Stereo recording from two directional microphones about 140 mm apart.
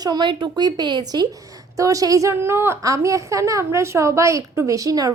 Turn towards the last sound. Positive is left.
turn(degrees=-25)  # may be behind; listen again after turning